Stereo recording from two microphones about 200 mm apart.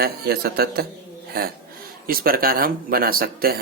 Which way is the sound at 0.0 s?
50° right (ahead or behind).